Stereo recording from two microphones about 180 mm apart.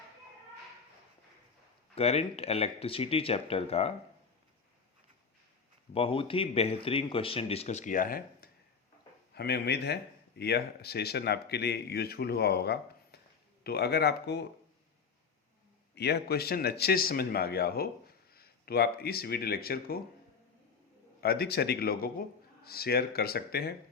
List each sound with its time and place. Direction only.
2.0 s speech: 35° left (ahead or behind)
5.9 s speech: 30° left (ahead or behind); by 8.4 s 50° left (ahead or behind)
9.3 s speech: 65° left (ahead or behind)
16.0 s speech: 65° left (ahead or behind)
21.2 s speech: 60° left (ahead or behind)